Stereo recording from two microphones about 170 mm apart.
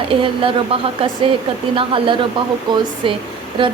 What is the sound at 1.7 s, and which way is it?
A woman's voice, 30° right (ahead or behind).